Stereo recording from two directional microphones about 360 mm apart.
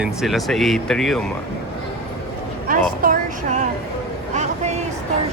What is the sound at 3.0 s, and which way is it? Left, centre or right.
Music, right.